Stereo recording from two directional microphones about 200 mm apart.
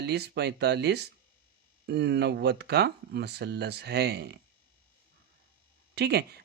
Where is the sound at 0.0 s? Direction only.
55° right (ahead or behind).